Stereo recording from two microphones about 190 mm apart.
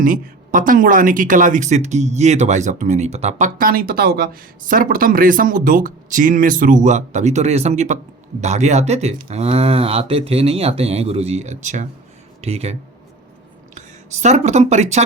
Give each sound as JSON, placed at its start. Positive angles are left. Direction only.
{"t": 0.0, "sound": "speech", "side_deg": -45}
{"t": 13.7, "sound": "speech", "side_deg": -35}